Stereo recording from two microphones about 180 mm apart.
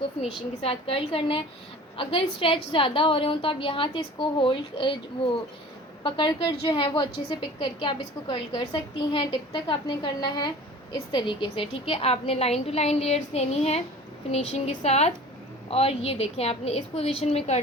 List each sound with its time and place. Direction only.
0.2 s a woman's voice: 30° left (ahead or behind)
6.0 s a woman's voice: 25° left (ahead or behind)